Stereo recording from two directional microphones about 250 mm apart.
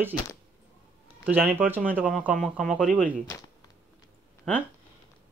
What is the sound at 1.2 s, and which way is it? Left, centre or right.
Speech, centre.